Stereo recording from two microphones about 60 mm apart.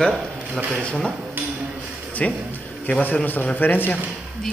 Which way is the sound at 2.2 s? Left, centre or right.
Left.